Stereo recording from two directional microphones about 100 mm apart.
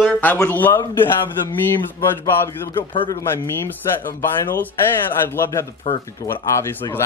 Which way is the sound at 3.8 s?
35° left (ahead or behind).